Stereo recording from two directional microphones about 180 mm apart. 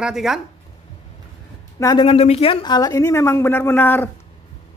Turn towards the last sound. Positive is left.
turn(degrees=10)  # may be behind; listen again after turning